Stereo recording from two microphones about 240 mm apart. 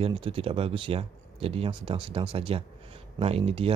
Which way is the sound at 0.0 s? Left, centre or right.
Right.